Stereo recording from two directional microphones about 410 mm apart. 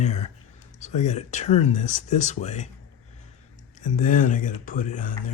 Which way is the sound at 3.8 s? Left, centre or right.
Centre.